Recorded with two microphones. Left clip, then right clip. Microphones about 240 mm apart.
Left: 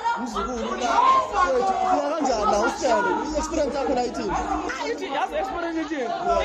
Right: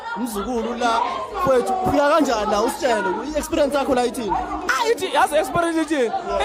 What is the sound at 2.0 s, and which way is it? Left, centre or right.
Speech, right.